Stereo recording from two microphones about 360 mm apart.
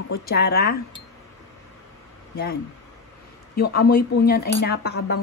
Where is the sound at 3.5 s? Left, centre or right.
Left.